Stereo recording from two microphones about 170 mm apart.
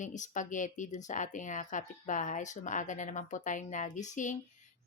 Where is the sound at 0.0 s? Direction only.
45° left (ahead or behind).